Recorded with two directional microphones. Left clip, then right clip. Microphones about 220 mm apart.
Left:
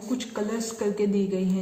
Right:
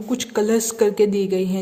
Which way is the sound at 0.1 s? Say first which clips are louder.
Right 10 dB; 50° right (ahead or behind).